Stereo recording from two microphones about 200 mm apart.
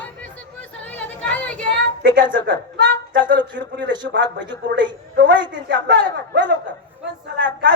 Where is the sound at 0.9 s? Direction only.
5° left (ahead or behind).